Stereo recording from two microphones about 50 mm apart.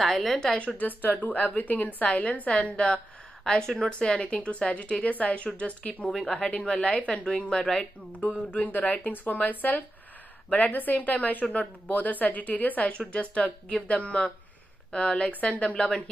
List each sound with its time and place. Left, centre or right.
0.0 s a woman's voice: centre
0.7 s speech: left; by 4.2 s centre
4.2 s speech: left
6.0 s speech: centre
7.4 s speech: centre
8.5 s speech: left
11.4 s a woman's voice: centre
11.9 s speech: left